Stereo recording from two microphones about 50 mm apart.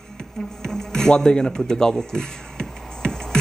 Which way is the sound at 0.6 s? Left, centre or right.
Centre.